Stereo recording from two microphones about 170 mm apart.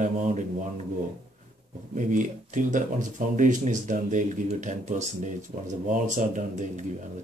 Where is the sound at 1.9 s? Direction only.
50° right (ahead or behind).